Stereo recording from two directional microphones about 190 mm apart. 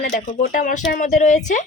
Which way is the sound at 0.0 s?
50° left (ahead or behind).